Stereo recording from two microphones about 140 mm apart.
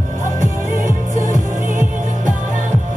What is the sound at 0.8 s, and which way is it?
Music, 65° right (ahead or behind).